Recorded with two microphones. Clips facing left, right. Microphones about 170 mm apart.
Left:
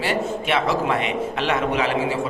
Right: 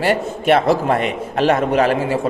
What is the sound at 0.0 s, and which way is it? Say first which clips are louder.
A man's voice: right 5 dB; 50° right (ahead or behind).